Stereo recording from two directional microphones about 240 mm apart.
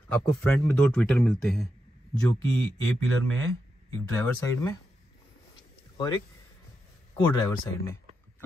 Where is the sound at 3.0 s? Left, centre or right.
Right.